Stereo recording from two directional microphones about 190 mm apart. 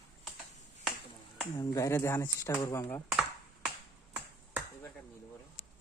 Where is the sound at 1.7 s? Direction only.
15° left (ahead or behind).